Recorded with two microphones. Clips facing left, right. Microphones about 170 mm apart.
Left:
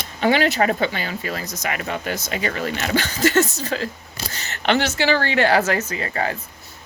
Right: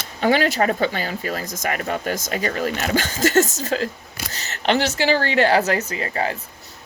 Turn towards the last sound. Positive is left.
turn(degrees=-30)  # may be behind; listen again after turning